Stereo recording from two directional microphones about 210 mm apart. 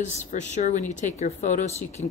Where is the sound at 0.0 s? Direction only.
35° left (ahead or behind).